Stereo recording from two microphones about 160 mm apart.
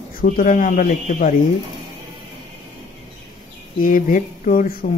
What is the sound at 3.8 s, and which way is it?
Speech, 60° left (ahead or behind).